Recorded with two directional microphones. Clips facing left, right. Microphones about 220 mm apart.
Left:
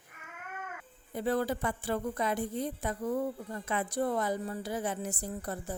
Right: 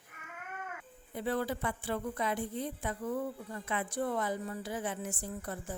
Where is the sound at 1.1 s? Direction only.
40° left (ahead or behind).